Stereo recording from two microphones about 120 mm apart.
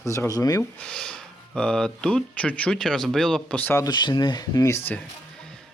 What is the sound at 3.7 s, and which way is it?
Speech, 35° left (ahead or behind).